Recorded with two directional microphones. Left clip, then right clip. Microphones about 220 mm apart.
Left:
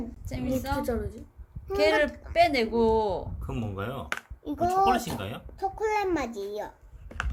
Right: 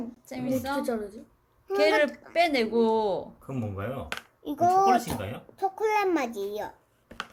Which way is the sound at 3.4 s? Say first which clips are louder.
Even; 30° left (ahead or behind).